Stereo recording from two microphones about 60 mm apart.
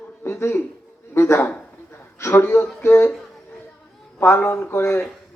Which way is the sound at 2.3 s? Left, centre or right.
Left.